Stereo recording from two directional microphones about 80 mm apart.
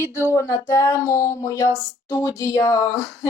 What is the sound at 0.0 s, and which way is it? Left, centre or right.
Speech, right.